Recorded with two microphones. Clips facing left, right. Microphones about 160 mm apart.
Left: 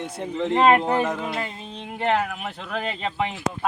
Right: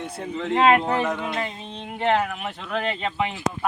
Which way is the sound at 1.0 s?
5° left (ahead or behind).